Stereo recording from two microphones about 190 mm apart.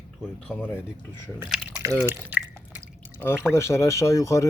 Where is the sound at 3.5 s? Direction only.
15° left (ahead or behind).